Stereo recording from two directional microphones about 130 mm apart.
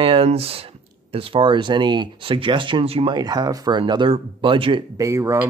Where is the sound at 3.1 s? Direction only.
30° right (ahead or behind).